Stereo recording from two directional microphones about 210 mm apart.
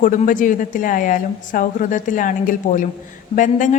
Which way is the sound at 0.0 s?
40° left (ahead or behind).